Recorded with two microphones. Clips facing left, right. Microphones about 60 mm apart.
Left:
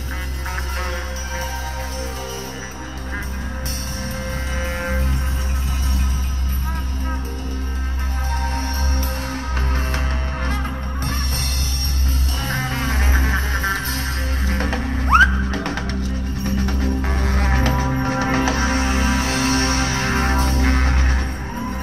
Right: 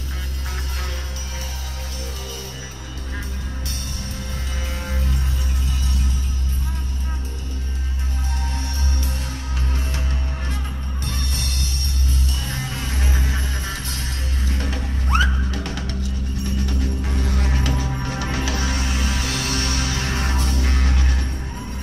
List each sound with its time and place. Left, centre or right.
4.6 s music: left
8.3 s music: left
12.4 s music: left